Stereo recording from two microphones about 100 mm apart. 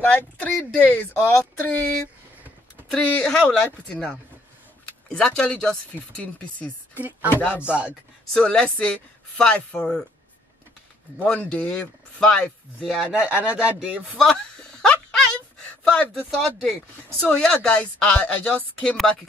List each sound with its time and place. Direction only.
0.0 s speech: 20° left (ahead or behind)
5.1 s speech: 10° left (ahead or behind)
7.0 s speech: 15° right (ahead or behind)
7.2 s speech: 20° left (ahead or behind)
7.6 s speech: 10° right (ahead or behind)
8.3 s speech: 10° left (ahead or behind)
11.2 s speech: 10° left (ahead or behind); by 14.0 s 15° right (ahead or behind)
14.3 s a sound: 10° left (ahead or behind)
17.2 s speech: 10° left (ahead or behind)